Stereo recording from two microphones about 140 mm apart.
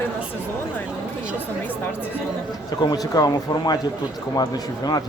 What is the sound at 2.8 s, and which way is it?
Speech, 30° left (ahead or behind).